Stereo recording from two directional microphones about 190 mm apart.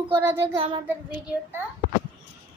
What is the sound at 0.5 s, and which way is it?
Child singing, 25° right (ahead or behind).